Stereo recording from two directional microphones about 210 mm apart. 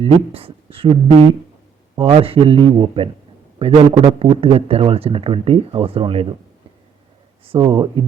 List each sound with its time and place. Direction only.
0.0 s speech: 25° right (ahead or behind)
7.4 s speech: 25° right (ahead or behind)